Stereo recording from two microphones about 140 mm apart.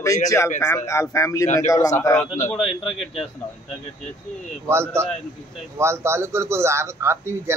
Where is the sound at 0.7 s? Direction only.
20° left (ahead or behind).